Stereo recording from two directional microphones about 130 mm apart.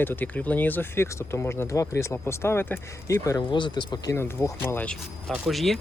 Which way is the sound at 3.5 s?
35° left (ahead or behind).